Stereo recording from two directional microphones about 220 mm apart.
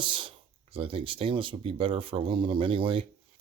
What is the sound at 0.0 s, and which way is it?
Speech, 25° right (ahead or behind).